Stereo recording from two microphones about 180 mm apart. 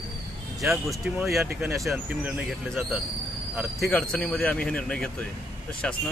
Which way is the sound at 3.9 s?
5° left (ahead or behind).